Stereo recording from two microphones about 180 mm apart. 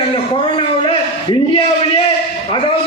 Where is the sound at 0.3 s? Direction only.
30° left (ahead or behind).